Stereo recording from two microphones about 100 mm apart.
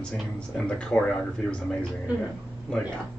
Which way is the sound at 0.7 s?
10° left (ahead or behind).